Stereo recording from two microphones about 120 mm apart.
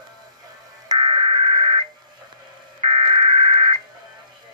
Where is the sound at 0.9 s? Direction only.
35° right (ahead or behind).